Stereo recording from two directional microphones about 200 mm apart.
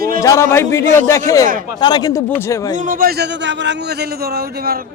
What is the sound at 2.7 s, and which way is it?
A man's voice, 40° right (ahead or behind).